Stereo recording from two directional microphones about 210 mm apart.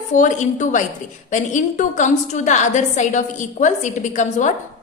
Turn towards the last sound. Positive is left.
turn(degrees=35)  # may be behind; listen again after turning